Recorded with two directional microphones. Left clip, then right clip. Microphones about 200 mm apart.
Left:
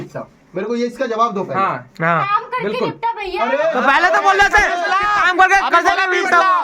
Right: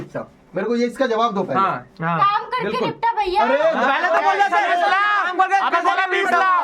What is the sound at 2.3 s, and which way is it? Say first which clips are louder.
A woman's voice: left 3 dB; 5° right (ahead or behind).